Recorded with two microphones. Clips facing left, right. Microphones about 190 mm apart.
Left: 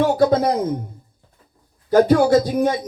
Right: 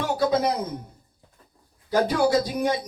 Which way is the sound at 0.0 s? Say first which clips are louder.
Left 7 dB; 50° left (ahead or behind).